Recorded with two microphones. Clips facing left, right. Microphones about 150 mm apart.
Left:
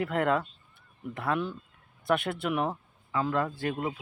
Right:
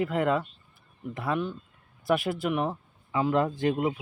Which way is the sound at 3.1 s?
20° right (ahead or behind).